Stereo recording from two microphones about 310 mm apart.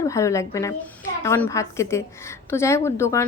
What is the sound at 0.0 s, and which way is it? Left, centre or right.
A woman's voice, centre.